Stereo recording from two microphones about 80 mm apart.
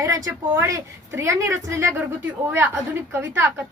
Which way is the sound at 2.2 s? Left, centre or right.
Right.